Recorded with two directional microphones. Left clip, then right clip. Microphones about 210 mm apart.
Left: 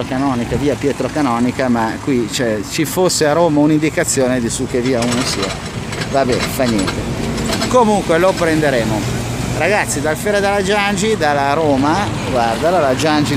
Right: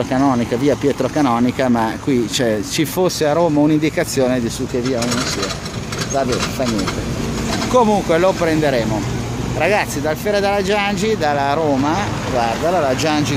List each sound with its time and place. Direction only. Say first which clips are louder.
0.1 s speech: right 2 dB; 20° right (ahead or behind)
4.8 s speech: left 3 dB; 45° right (ahead or behind)
7.7 s speech: left 1 dB; 5° right (ahead or behind)